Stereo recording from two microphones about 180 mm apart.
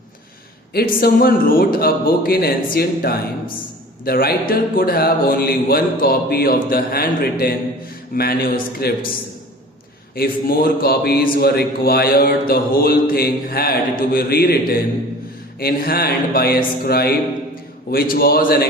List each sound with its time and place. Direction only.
0.7 s a man's voice: 55° left (ahead or behind)
10.2 s a man's voice: 55° left (ahead or behind)